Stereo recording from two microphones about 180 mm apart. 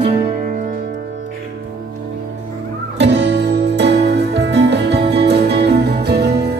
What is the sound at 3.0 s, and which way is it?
Music, 70° right (ahead or behind).